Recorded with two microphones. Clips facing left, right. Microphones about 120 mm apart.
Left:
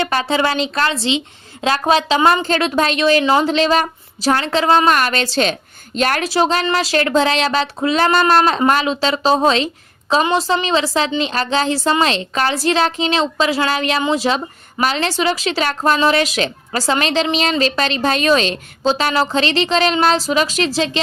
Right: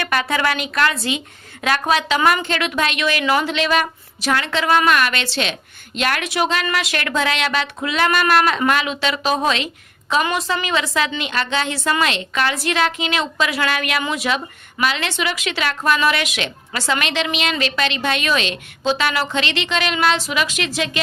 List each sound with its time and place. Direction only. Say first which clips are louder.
0.0 s a woman's voice: left 3 dB; 30° left (ahead or behind)